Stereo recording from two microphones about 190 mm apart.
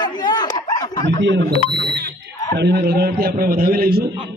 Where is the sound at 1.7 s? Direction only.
60° right (ahead or behind).